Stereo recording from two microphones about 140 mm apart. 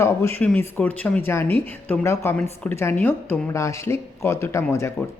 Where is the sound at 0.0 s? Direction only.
15° left (ahead or behind).